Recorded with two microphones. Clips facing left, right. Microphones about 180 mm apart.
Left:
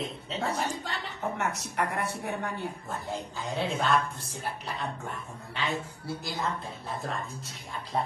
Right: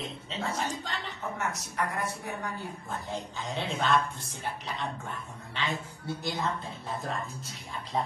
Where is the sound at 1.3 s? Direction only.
65° left (ahead or behind).